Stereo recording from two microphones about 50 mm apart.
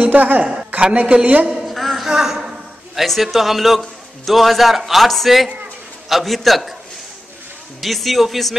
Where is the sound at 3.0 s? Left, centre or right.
Centre.